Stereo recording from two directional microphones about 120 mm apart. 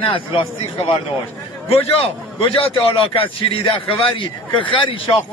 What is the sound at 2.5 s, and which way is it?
A man's voice, 50° left (ahead or behind).